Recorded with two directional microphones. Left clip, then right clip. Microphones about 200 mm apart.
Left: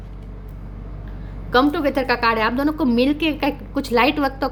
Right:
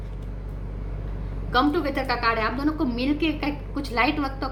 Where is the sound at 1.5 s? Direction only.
50° left (ahead or behind).